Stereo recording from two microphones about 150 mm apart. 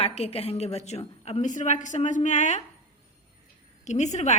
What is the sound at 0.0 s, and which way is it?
A woman's voice, 40° left (ahead or behind).